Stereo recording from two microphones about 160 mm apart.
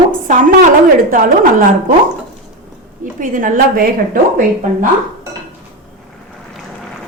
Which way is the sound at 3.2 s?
55° right (ahead or behind).